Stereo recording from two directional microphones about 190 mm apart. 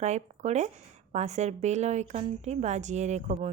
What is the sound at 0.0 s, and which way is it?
Speech, 35° right (ahead or behind).